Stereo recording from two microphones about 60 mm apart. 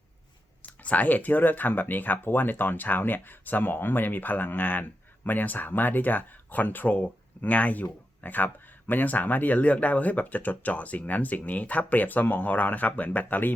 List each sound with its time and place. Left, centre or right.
0.6 s speech: left